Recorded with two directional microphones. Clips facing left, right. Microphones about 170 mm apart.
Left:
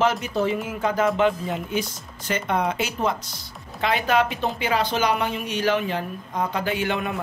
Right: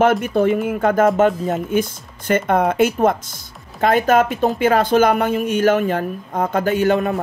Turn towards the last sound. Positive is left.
turn(degrees=-40)  # may be behind; listen again after turning